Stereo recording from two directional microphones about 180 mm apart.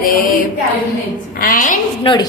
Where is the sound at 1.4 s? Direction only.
50° left (ahead or behind).